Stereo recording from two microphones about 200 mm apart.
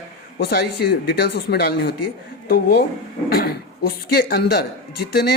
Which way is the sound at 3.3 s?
50° left (ahead or behind).